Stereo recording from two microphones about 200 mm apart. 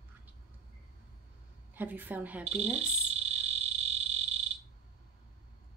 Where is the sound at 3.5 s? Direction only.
30° right (ahead or behind).